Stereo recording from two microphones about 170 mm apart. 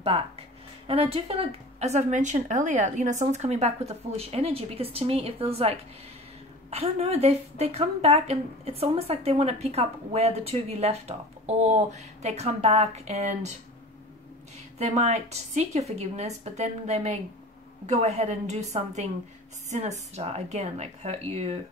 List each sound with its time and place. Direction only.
0.8 s a woman's voice: 35° right (ahead or behind)
14.8 s a woman's voice: 40° right (ahead or behind)